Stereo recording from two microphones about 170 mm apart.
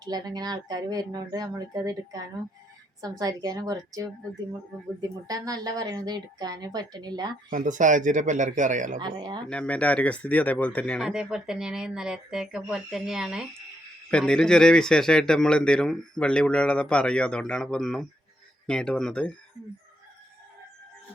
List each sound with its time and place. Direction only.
0.0 s a woman's voice: 25° right (ahead or behind)
7.5 s speech: 50° right (ahead or behind)
9.0 s a woman's voice: 25° right (ahead or behind)
9.5 s speech: 5° left (ahead or behind)
11.0 s speech: 5° right (ahead or behind)